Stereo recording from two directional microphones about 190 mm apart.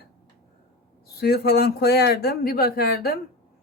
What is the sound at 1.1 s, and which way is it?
Speech, 55° left (ahead or behind).